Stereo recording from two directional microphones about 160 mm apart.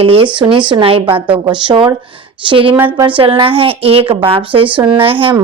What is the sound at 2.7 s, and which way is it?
Speech, 15° right (ahead or behind).